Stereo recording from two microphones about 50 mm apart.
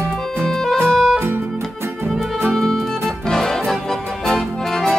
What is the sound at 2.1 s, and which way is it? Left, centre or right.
Music, centre.